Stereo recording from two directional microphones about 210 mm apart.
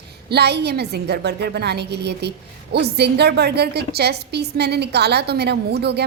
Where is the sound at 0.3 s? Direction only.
50° right (ahead or behind).